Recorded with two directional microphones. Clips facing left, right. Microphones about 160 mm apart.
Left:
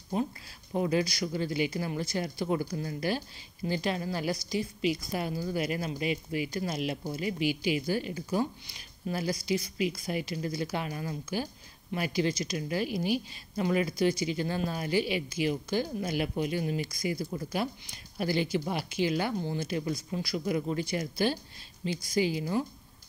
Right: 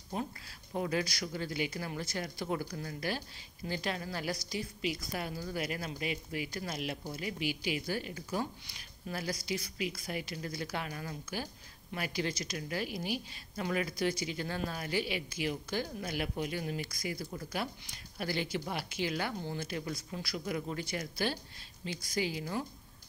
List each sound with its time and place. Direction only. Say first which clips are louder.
0.7 s speech: left 6 dB; 20° left (ahead or behind)
7.3 s a woman's voice: left 7 dB; 90° left
7.7 s speech: left 6 dB; 25° left (ahead or behind)